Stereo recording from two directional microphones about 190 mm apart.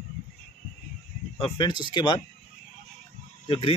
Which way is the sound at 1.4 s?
25° left (ahead or behind).